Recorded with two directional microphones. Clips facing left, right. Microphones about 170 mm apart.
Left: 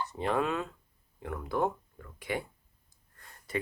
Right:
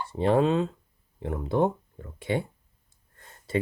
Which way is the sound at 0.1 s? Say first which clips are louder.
Right 10 dB; 30° right (ahead or behind).